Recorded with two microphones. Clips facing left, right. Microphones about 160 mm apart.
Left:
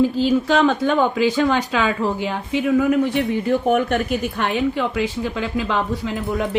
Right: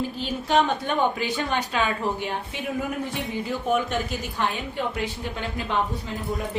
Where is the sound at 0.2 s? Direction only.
90° left.